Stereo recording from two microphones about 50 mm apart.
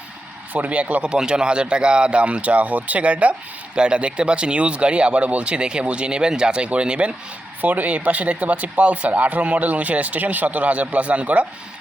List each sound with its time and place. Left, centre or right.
0.5 s speech: right
1.0 s speech: centre
7.6 s speech: right